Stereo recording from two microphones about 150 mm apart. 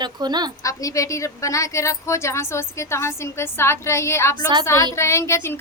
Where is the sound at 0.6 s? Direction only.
20° left (ahead or behind).